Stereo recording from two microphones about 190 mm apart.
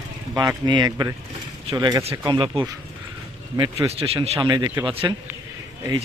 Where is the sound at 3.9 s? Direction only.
30° right (ahead or behind).